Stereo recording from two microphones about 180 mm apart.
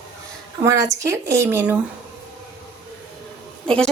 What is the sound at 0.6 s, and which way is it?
Speech, 15° right (ahead or behind).